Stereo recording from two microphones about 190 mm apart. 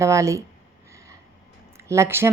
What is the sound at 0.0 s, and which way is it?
Speech, 15° right (ahead or behind).